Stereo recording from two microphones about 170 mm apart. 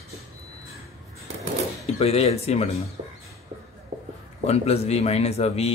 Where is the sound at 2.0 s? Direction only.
35° left (ahead or behind).